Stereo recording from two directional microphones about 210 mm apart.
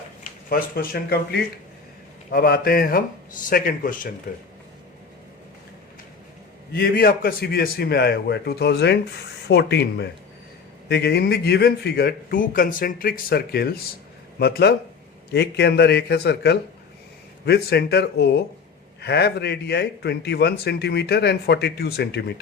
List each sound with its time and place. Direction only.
0.5 s a man's voice: 45° left (ahead or behind)
6.7 s a man's voice: 45° left (ahead or behind)